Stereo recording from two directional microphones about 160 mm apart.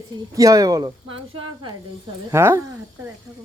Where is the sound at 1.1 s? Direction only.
30° right (ahead or behind).